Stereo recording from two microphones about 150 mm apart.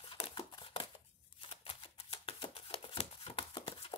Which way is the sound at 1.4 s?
35° left (ahead or behind).